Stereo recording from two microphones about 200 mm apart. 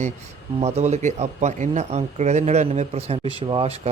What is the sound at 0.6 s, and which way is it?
Speech, 30° right (ahead or behind).